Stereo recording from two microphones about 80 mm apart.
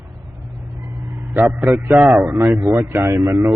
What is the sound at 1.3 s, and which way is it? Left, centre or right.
Speech, right.